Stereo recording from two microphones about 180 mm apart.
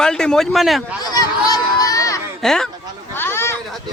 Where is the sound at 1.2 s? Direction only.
20° left (ahead or behind).